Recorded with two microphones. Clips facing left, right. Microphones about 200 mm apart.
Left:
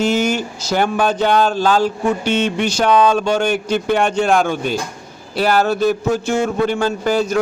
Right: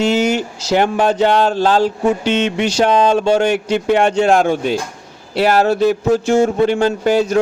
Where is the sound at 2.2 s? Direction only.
80° right.